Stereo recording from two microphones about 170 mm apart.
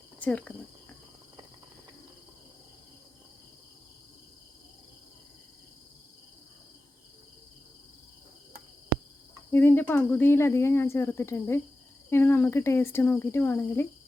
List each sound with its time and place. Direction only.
0.2 s speech: 10° left (ahead or behind)
9.5 s speech: 10° left (ahead or behind)